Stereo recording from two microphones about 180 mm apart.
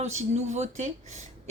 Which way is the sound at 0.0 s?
40° right (ahead or behind).